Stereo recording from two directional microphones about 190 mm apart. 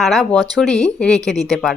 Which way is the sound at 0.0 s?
Centre (ahead or behind).